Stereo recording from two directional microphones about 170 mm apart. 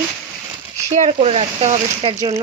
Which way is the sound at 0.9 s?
40° right (ahead or behind).